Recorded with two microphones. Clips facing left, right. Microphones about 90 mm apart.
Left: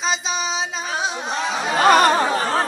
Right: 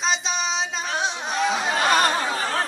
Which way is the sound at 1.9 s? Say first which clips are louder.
Left 7 dB; 75° left (ahead or behind).